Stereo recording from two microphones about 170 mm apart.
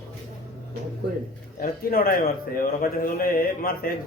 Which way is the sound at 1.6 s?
60° left (ahead or behind).